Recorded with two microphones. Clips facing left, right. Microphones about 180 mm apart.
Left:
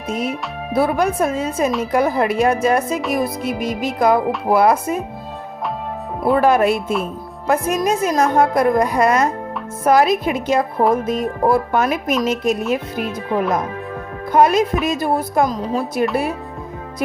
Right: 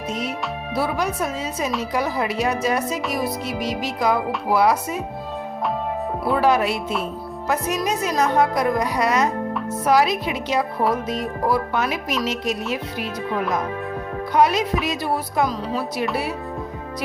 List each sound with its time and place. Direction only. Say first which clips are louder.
0.1 s a woman's voice: left 5 dB; 55° left (ahead or behind)
6.3 s a woman's voice: left 5 dB; 50° left (ahead or behind)
14.3 s a woman's voice: left 4 dB; 50° left (ahead or behind)